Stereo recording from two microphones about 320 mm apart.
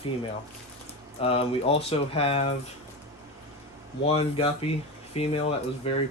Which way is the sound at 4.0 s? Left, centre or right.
Centre.